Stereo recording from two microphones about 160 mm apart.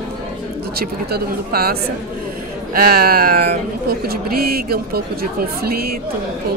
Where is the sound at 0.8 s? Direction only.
75° right (ahead or behind).